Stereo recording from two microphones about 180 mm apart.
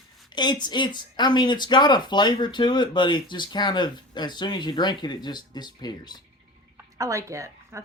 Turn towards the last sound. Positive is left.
turn(degrees=-15)  # may be behind; listen again after turning